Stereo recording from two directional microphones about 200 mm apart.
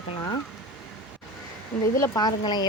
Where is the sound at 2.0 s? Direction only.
20° left (ahead or behind).